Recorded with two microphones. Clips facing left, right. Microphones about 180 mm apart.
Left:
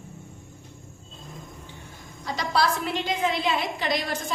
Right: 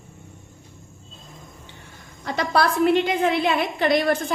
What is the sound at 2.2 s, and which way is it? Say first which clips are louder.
A woman's voice: right 4 dB; 60° right (ahead or behind).